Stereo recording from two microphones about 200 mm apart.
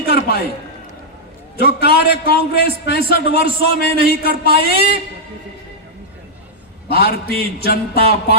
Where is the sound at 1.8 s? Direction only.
50° left (ahead or behind).